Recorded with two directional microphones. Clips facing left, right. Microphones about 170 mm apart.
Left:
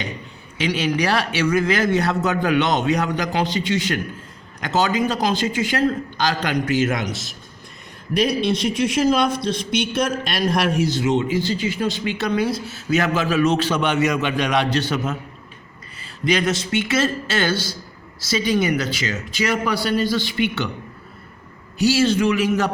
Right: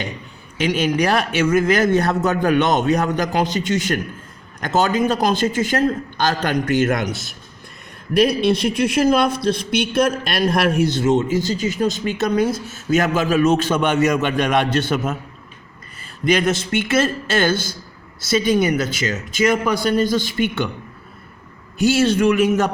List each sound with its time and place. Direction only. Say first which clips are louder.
0.6 s a man's voice: right 3 dB; 50° right (ahead or behind)
21.8 s a man's voice: right 1 dB; 50° right (ahead or behind)